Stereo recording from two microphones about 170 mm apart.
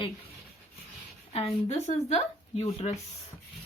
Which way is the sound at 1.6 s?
40° left (ahead or behind).